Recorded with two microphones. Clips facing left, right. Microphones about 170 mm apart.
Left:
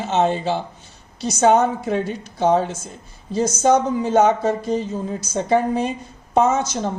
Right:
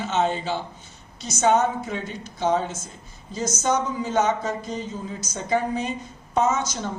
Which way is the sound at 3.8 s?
55° left (ahead or behind).